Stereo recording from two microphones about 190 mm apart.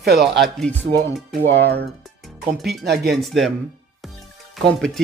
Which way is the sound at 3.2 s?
Centre (ahead or behind).